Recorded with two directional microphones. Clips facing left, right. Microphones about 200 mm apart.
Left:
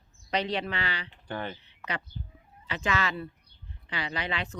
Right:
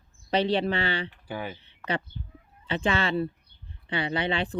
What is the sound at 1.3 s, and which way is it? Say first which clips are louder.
Speech: left 1 dB; 5° right (ahead or behind).